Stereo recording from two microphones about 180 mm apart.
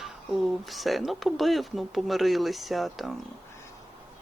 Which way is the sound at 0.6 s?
Centre (ahead or behind).